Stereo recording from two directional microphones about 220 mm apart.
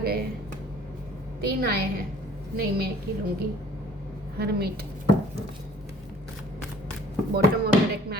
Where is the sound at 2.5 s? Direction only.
45° right (ahead or behind).